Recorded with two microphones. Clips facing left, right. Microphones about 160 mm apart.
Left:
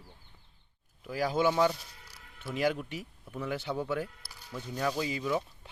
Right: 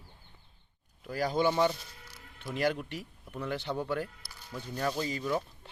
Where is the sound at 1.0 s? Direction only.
5° left (ahead or behind).